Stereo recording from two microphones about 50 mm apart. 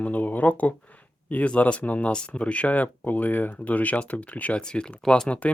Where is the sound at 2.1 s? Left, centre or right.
Centre.